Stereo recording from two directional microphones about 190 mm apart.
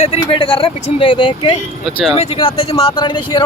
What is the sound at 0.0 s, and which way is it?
Speech, 30° left (ahead or behind).